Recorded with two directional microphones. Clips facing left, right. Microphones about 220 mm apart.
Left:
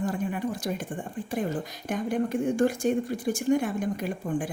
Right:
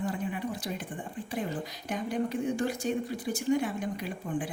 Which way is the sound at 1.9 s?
50° left (ahead or behind).